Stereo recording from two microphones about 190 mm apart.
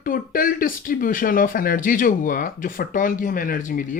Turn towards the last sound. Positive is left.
turn(degrees=45)  # may be behind; listen again after turning